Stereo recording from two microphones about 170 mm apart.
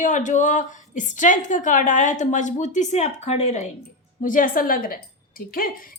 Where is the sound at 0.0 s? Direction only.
45° left (ahead or behind).